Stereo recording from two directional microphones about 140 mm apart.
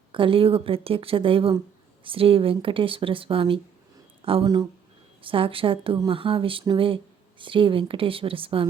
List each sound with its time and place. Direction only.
0.1 s speech: 40° right (ahead or behind)